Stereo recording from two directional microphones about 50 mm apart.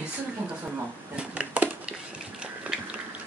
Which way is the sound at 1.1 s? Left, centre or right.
Right.